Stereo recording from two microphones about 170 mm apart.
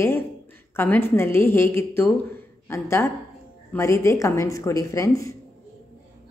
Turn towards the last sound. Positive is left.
turn(degrees=20)  # may be behind; listen again after turning